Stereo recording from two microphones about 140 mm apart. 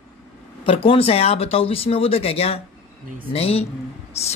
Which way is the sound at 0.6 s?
40° left (ahead or behind).